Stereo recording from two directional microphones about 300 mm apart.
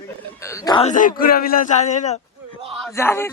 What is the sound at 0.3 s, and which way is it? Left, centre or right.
Speech, centre.